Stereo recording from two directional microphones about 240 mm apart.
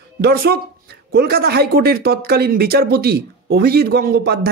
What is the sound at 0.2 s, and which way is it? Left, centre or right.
Speech, right.